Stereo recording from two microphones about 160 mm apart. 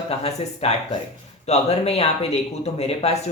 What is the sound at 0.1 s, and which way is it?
Speech, 40° left (ahead or behind).